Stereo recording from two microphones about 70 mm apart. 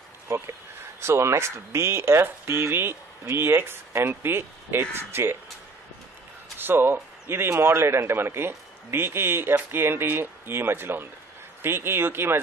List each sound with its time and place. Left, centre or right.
1.0 s speech: right
6.6 s speech: right